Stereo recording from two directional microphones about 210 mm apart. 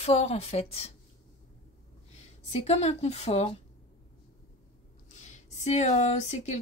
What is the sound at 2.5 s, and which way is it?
Speech, 30° left (ahead or behind).